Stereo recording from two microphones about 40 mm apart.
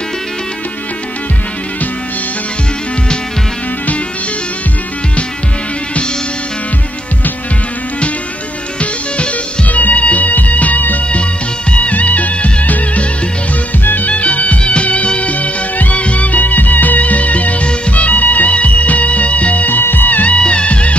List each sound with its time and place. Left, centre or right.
9.7 s music: left
14.0 s music: left
19.7 s music: left
20.1 s music: left
20.3 s music: left